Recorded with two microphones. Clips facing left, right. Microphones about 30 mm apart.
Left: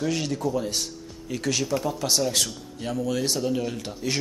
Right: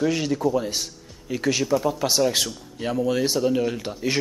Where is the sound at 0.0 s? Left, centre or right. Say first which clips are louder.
Right 4 dB; centre.